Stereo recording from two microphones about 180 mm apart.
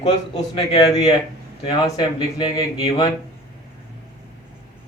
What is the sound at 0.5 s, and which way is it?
Speech, 20° left (ahead or behind).